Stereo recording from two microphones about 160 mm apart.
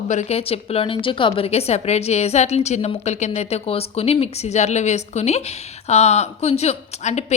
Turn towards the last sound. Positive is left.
turn(degrees=45)  # may be behind; listen again after turning